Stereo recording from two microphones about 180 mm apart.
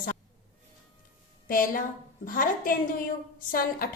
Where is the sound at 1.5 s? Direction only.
50° left (ahead or behind).